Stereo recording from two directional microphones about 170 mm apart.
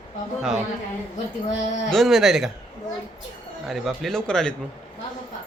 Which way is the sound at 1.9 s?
Centre (ahead or behind).